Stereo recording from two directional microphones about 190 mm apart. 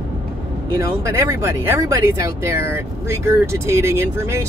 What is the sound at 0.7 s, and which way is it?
Speech, 15° right (ahead or behind).